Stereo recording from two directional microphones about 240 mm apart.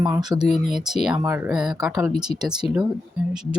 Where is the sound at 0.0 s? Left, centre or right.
Centre.